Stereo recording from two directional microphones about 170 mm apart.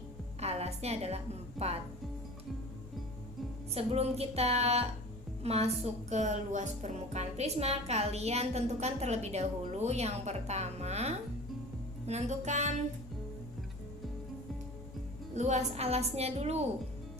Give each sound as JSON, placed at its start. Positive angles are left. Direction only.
{"t": 0.3, "sound": "a woman's voice", "side_deg": -40}
{"t": 3.8, "sound": "speech", "side_deg": -35}
{"t": 12.0, "sound": "music", "side_deg": -40}
{"t": 15.4, "sound": "speech", "side_deg": -40}